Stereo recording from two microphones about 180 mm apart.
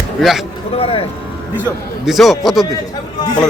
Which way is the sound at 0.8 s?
30° left (ahead or behind).